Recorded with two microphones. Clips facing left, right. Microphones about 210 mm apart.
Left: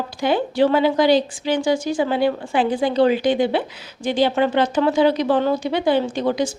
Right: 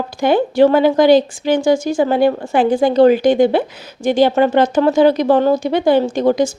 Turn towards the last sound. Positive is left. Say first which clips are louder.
# right 6 dB
turn(degrees=-45)  # may be behind; listen again after turning